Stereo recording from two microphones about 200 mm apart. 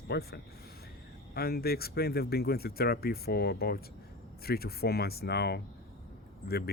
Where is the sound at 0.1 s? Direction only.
50° left (ahead or behind).